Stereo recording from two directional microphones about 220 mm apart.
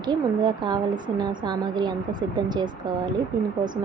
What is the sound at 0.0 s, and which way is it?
A woman's voice, 20° right (ahead or behind).